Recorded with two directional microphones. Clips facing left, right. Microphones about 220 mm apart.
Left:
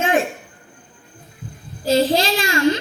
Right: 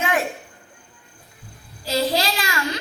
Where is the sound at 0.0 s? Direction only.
25° left (ahead or behind).